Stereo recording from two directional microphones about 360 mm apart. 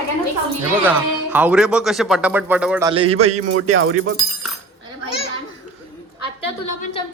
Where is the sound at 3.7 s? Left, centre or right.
Right.